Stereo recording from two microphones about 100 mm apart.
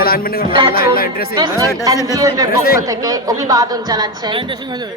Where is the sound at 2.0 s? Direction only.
35° right (ahead or behind).